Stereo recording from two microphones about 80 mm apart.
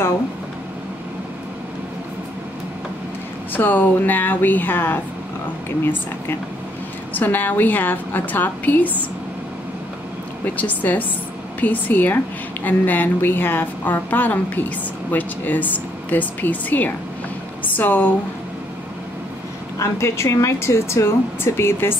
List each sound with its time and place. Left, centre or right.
3.5 s a woman's voice: left
7.2 s a woman's voice: left
10.4 s a woman's voice: left
19.8 s speech: left